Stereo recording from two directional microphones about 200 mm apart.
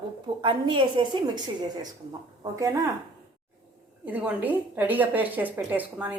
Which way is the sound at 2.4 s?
15° right (ahead or behind).